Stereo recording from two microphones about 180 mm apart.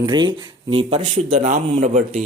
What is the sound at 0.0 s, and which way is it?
Speech, 25° right (ahead or behind).